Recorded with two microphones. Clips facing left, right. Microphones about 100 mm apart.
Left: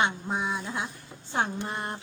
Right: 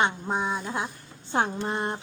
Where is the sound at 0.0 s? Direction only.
25° right (ahead or behind).